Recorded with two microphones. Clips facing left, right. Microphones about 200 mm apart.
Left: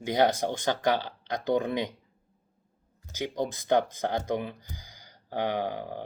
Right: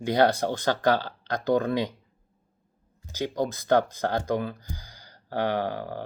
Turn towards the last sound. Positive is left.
turn(degrees=15)  # may be behind; listen again after turning